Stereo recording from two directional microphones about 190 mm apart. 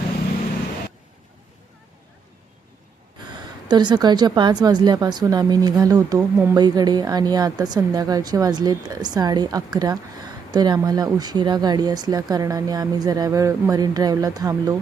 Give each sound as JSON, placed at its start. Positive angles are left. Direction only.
{"t": 3.7, "sound": "speech", "side_deg": -20}